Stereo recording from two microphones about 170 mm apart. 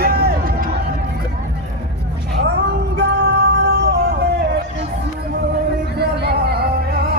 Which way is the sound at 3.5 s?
80° right.